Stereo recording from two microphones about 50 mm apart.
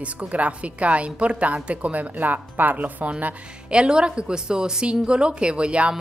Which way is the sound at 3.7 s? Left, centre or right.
Centre.